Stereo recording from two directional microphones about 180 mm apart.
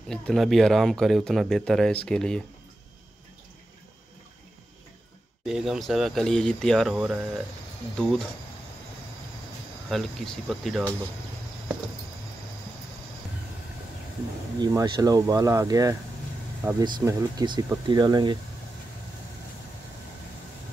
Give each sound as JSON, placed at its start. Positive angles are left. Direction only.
{"t": 0.1, "sound": "speech", "side_deg": 0}
{"t": 5.4, "sound": "speech", "side_deg": 0}
{"t": 9.8, "sound": "speech", "side_deg": 0}
{"t": 14.6, "sound": "speech", "side_deg": -20}